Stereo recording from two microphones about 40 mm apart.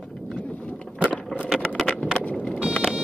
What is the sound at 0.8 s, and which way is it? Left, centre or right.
Vehicle, left.